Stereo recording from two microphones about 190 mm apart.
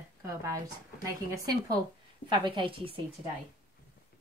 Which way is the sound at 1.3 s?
20° right (ahead or behind).